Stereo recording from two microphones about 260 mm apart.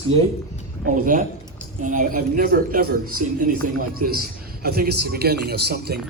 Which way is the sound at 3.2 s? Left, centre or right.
Right.